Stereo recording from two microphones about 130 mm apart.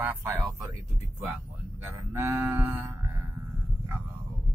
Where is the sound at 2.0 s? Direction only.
20° right (ahead or behind).